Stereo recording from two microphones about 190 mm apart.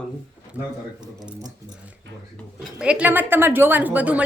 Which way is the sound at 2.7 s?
5° right (ahead or behind).